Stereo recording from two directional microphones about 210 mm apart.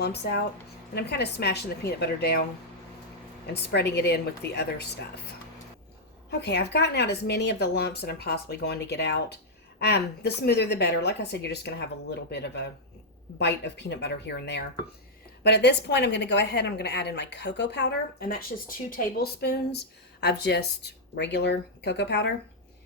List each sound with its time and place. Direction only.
0.0 s a woman's voice: 50° left (ahead or behind)
3.4 s a woman's voice: 50° left (ahead or behind)
6.4 s a woman's voice: 55° left (ahead or behind)